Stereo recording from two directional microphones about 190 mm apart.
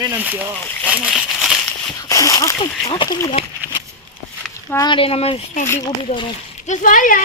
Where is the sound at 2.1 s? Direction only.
20° left (ahead or behind).